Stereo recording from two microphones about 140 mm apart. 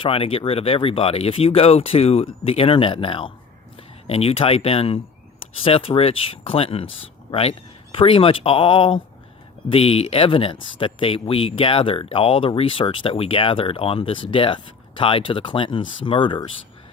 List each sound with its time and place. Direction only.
0.0 s speech: 40° left (ahead or behind)
7.9 s speech: 40° left (ahead or behind)